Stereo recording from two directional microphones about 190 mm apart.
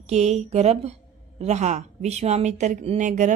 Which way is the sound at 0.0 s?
35° right (ahead or behind).